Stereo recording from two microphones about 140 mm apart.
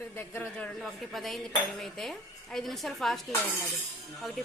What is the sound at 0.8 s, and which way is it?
A woman's voice, centre (ahead or behind).